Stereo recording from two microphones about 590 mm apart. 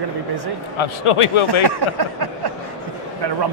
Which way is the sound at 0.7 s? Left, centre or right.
Left.